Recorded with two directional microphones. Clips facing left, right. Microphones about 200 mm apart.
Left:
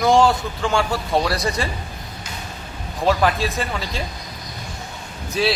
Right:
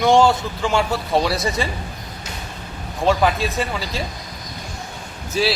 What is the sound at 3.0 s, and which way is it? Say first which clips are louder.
A man's voice: right 1 dB; centre (ahead or behind).